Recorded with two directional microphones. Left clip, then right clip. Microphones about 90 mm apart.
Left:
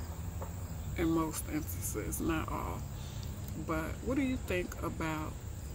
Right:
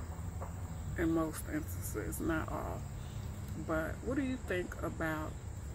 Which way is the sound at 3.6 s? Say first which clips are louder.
Even; 20° left (ahead or behind).